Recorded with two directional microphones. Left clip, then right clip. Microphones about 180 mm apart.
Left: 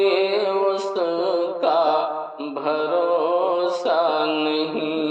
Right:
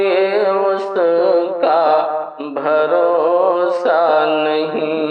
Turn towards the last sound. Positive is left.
turn(degrees=-20)  # may be behind; listen again after turning